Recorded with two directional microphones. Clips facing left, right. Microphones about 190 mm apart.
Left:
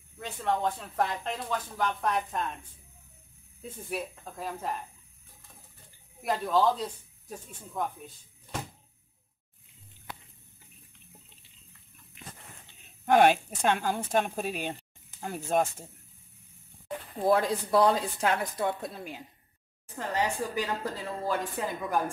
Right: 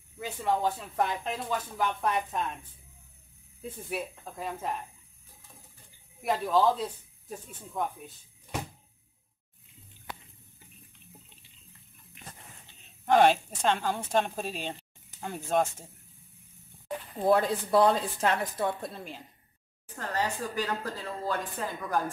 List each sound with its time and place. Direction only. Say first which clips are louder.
0.2 s speech: right 1 dB; 5° right (ahead or behind)
3.9 s speech: left 1 dB; centre (ahead or behind)
6.2 s speech: right 1 dB; centre (ahead or behind)
13.0 s speech: even; 10° left (ahead or behind)
17.3 s a woman's voice: right 1 dB; centre (ahead or behind); by 21.7 s 15° left (ahead or behind)